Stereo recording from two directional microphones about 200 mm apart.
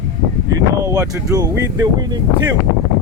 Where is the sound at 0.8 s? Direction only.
15° right (ahead or behind).